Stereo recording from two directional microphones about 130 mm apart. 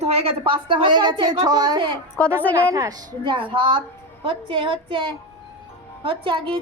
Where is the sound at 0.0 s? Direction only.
50° right (ahead or behind).